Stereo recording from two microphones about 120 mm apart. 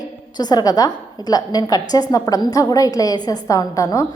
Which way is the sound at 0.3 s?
35° left (ahead or behind).